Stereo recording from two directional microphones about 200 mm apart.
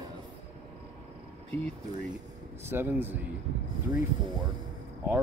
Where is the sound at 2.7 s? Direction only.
10° right (ahead or behind).